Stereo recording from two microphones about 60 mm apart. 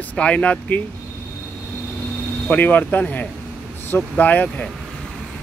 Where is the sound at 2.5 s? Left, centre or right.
Left.